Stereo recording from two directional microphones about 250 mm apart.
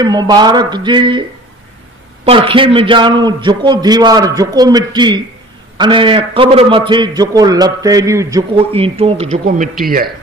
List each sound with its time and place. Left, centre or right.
0.0 s a man's voice: centre
2.2 s a man's voice: right